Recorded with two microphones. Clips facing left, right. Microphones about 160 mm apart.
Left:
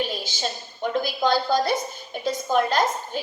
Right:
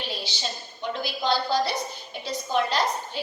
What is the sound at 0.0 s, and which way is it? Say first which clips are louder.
A woman's voice: left 5 dB; 50° left (ahead or behind).